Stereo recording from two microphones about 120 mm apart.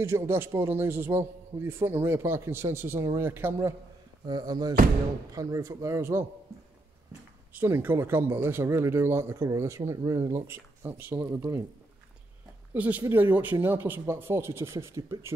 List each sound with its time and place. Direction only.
0.0 s speech: 20° right (ahead or behind)
4.3 s speech: 35° right (ahead or behind); by 11.1 s 20° right (ahead or behind)
11.1 s speech: 30° right (ahead or behind)
12.7 s speech: 10° right (ahead or behind)